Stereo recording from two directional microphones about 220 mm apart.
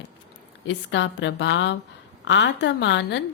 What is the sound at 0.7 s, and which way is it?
A woman's voice, 55° left (ahead or behind).